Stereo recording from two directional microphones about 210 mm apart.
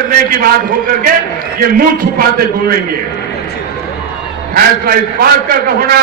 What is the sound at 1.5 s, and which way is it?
Speech, 45° right (ahead or behind).